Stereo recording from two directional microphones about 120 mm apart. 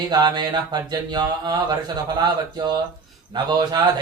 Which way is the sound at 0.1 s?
35° right (ahead or behind).